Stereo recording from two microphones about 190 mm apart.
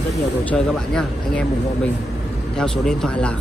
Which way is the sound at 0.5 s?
5° left (ahead or behind).